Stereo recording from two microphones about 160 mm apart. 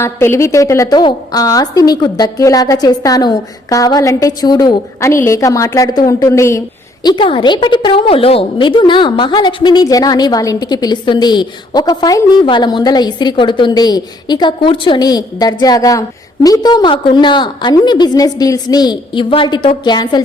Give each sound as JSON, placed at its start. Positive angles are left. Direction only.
{"t": 0.0, "sound": "a woman's voice", "side_deg": 15}
{"t": 7.0, "sound": "a woman's voice", "side_deg": 30}